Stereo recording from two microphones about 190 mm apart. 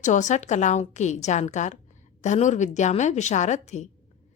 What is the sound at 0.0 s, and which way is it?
A woman's voice, 40° left (ahead or behind).